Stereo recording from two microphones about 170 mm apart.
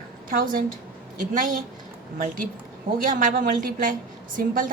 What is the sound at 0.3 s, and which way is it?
Speech, 55° right (ahead or behind).